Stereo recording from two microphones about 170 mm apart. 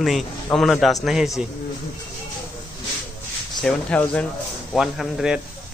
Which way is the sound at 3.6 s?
5° left (ahead or behind).